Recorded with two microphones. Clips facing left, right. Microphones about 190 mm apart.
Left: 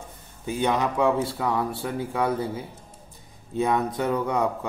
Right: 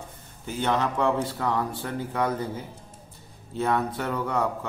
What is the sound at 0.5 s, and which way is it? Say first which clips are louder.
Speech: left 2 dB; 15° left (ahead or behind).